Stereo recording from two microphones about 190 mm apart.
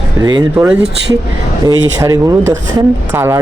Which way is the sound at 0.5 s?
5° right (ahead or behind).